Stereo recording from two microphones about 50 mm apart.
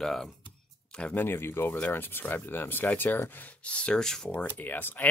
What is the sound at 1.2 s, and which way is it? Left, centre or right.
Speech, left.